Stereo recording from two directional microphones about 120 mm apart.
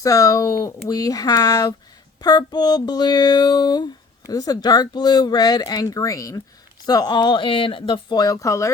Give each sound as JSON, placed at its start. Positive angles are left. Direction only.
{"t": 0.0, "sound": "speech", "side_deg": 30}